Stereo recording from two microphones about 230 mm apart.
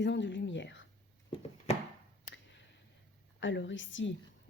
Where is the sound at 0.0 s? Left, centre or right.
Left.